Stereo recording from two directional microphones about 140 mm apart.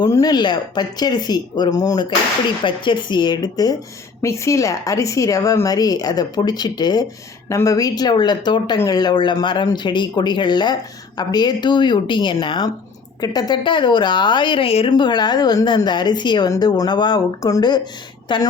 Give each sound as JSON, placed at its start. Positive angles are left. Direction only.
{"t": 0.0, "sound": "a woman's voice", "side_deg": 25}